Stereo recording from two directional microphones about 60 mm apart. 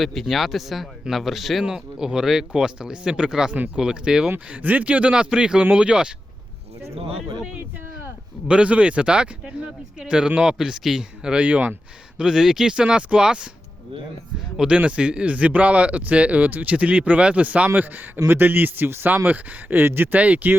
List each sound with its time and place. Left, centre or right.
0.0 s speech: centre
1.6 s speech: centre
4.5 s speech: right
8.4 s speech: centre
12.1 s speech: centre
14.5 s speech: centre
18.3 s a man's voice: right
20.1 s speech: right